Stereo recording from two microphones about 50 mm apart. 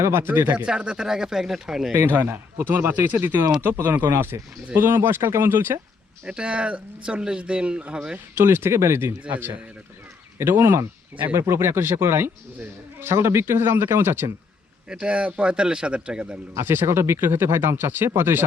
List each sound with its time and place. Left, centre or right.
0.0 s speech: right
0.5 s speech: right
2.0 s speech: right
6.2 s speech: right
8.4 s speech: right
10.4 s speech: right
14.8 s speech: right
16.8 s speech: right